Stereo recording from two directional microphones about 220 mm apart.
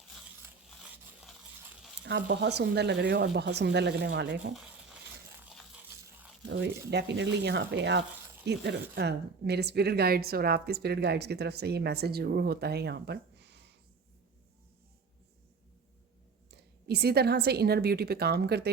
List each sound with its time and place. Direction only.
2.0 s a woman's voice: 50° right (ahead or behind)
6.4 s a woman's voice: 50° right (ahead or behind)
16.5 s a woman's voice: 50° right (ahead or behind)